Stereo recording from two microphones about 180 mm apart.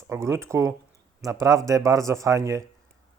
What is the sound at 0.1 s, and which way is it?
Speech, 15° right (ahead or behind).